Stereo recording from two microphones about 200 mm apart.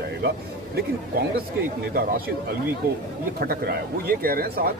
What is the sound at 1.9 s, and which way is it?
Speech, 50° right (ahead or behind).